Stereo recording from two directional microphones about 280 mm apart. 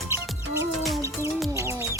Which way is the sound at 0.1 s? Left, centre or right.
Centre.